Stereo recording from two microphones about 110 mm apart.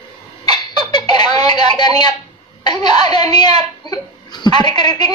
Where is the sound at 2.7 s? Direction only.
40° left (ahead or behind).